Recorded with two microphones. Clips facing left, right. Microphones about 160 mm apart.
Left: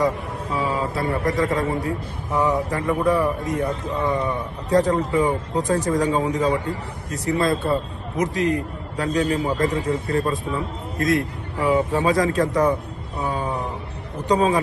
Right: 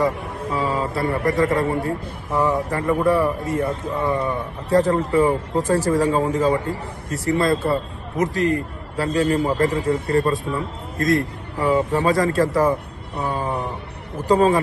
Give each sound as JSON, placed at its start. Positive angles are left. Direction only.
{"t": 0.5, "sound": "a man's voice", "side_deg": 0}
{"t": 13.1, "sound": "a sound", "side_deg": 0}
{"t": 14.3, "sound": "a man's voice", "side_deg": 0}